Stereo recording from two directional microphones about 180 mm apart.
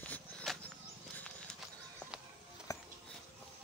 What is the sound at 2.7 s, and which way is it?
Music, 20° left (ahead or behind).